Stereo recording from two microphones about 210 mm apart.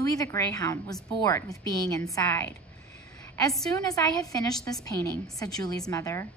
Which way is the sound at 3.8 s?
15° left (ahead or behind).